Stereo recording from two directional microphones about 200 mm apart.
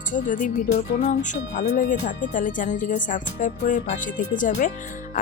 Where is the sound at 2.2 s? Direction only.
40° left (ahead or behind).